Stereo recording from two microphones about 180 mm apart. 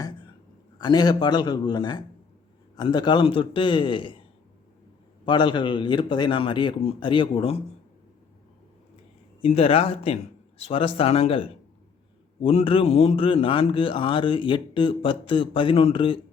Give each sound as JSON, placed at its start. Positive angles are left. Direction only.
{"t": 0.8, "sound": "a man's voice", "side_deg": 25}
{"t": 5.2, "sound": "a man's voice", "side_deg": 25}
{"t": 9.4, "sound": "a man's voice", "side_deg": 35}